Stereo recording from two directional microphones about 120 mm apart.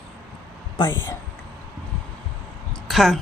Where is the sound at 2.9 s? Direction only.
Centre (ahead or behind).